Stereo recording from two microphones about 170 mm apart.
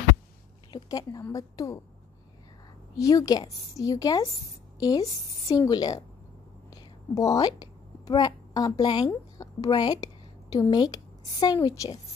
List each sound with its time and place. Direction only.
0.7 s a sound: 25° left (ahead or behind)
1.2 s a woman's voice: 20° left (ahead or behind)
3.0 s a woman's voice: 20° left (ahead or behind)